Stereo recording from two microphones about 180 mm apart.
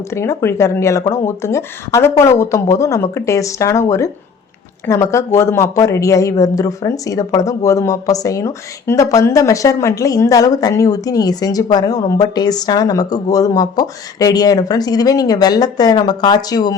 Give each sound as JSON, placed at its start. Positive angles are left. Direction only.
{"t": 0.1, "sound": "speech", "side_deg": 15}